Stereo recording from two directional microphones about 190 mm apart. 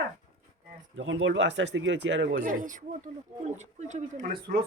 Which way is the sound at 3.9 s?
40° right (ahead or behind).